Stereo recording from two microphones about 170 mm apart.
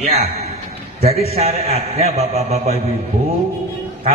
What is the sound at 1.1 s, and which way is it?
A man's voice, 35° right (ahead or behind).